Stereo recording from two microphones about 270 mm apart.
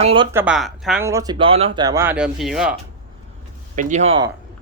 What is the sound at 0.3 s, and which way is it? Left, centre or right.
Speech, centre.